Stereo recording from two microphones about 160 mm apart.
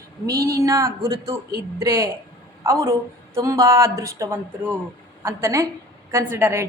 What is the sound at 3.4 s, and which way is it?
A woman's voice, 20° right (ahead or behind).